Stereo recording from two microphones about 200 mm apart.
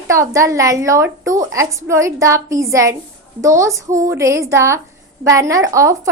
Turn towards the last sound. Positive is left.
turn(degrees=-15)  # may be behind; listen again after turning